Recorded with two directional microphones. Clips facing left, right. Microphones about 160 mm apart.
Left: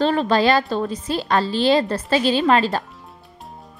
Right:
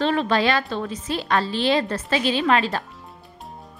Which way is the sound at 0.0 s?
35° left (ahead or behind).